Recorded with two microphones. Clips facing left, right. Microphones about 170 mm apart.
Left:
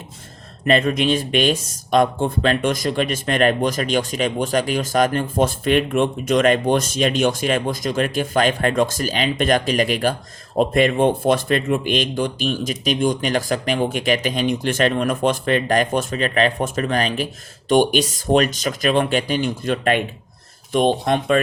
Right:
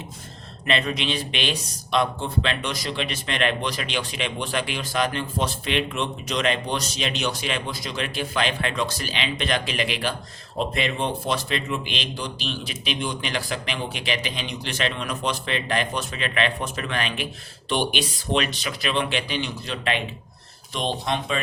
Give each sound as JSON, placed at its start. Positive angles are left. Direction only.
{"t": 0.6, "sound": "speech", "side_deg": 45}